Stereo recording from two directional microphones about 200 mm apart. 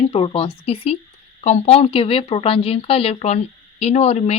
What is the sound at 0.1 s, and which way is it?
Speech, 30° left (ahead or behind).